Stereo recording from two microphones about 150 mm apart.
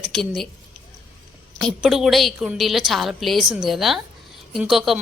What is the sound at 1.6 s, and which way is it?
Speech, 5° right (ahead or behind).